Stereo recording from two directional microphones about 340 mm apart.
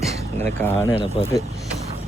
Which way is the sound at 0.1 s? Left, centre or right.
Centre.